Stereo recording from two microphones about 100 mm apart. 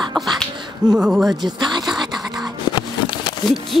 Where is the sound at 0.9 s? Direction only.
5° right (ahead or behind).